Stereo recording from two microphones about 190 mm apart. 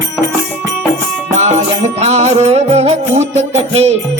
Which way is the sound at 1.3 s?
35° right (ahead or behind).